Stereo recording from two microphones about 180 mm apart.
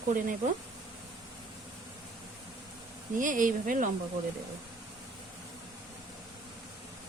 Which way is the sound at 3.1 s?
45° right (ahead or behind).